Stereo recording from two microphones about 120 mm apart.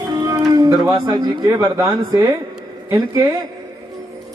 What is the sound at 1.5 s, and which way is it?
Speech, 25° right (ahead or behind).